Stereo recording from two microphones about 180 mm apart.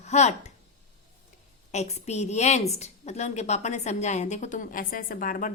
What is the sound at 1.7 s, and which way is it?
A woman's voice, 35° left (ahead or behind).